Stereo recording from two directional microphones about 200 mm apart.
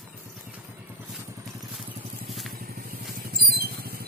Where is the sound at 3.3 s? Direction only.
50° right (ahead or behind).